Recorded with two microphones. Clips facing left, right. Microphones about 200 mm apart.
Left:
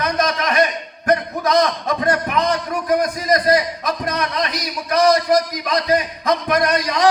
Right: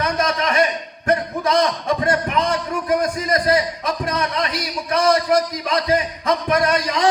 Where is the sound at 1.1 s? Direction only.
30° right (ahead or behind).